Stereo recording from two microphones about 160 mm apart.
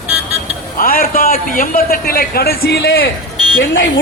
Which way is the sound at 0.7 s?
65° left (ahead or behind).